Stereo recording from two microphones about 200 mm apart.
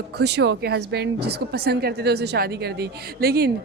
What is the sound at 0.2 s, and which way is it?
A woman's voice, 55° right (ahead or behind).